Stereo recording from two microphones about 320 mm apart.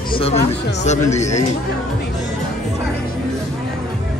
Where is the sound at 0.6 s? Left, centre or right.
Left.